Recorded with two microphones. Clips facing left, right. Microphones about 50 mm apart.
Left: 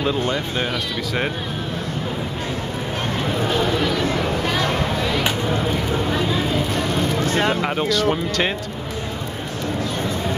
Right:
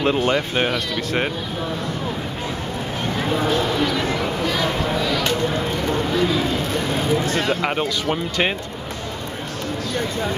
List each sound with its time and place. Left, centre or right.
0.0 s speech: right
0.7 s speech: centre
7.2 s speech: left
7.6 s speech: centre